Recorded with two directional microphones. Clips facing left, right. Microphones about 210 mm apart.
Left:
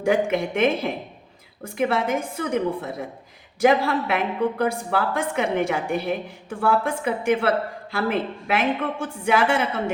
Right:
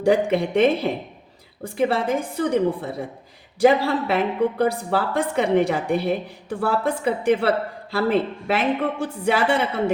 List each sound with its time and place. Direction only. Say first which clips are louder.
0.0 s a woman's voice: right 2 dB; 35° right (ahead or behind)